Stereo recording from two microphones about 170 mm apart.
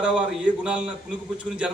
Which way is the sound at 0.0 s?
5° right (ahead or behind).